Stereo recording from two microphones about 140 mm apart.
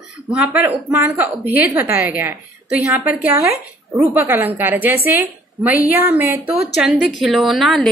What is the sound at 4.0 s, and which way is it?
A woman's voice, 15° right (ahead or behind).